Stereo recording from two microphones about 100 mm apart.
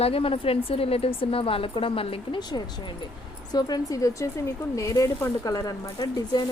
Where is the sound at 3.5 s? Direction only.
40° left (ahead or behind).